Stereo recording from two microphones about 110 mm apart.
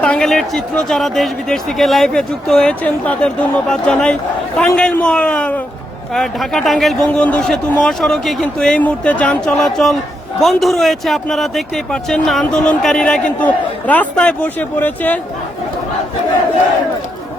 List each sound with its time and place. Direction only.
0.0 s a man's voice: 10° left (ahead or behind)